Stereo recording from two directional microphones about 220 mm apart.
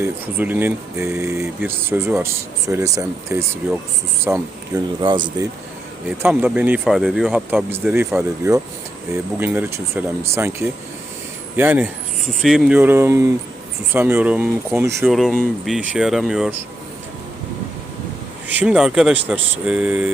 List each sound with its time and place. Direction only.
0.0 s speech: 10° right (ahead or behind)
6.2 s speech: 5° right (ahead or behind)
15.1 s speech: centre (ahead or behind)
18.4 s speech: 5° right (ahead or behind)